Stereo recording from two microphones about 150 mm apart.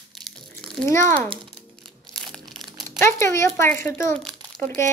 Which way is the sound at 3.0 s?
20° left (ahead or behind).